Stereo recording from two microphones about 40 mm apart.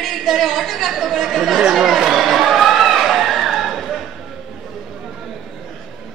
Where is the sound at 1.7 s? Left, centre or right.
Centre.